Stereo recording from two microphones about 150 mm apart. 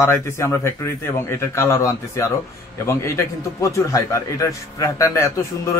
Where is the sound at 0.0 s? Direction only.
15° left (ahead or behind).